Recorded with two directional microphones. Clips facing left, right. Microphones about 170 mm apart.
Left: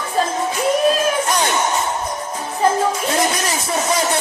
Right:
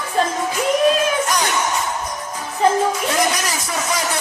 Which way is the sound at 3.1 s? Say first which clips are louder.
Left 1 dB; 25° left (ahead or behind).